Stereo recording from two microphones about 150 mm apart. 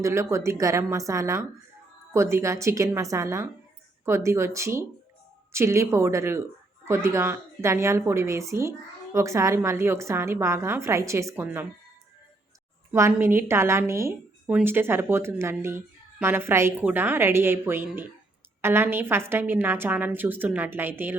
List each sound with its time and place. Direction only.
0.0 s a woman's voice: 20° right (ahead or behind)
12.9 s a woman's voice: 15° right (ahead or behind)